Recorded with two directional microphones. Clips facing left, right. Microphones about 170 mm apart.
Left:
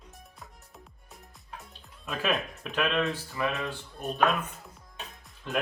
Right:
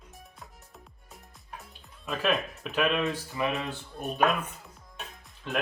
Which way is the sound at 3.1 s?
20° right (ahead or behind).